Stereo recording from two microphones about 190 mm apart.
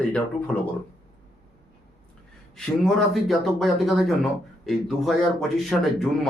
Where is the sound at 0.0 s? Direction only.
5° left (ahead or behind).